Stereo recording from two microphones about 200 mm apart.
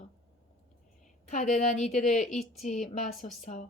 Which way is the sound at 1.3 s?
35° left (ahead or behind).